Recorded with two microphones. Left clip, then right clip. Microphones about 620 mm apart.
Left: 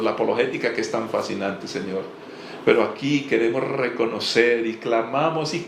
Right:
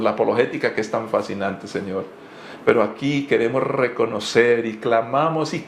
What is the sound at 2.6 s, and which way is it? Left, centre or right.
Speech, right.